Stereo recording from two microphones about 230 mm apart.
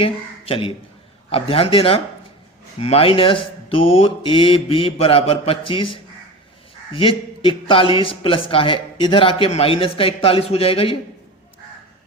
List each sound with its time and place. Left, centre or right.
0.0 s a man's voice: left